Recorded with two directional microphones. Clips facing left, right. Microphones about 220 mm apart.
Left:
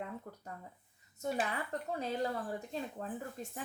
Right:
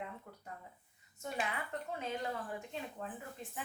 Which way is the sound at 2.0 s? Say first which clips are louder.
Left 5 dB; 35° left (ahead or behind).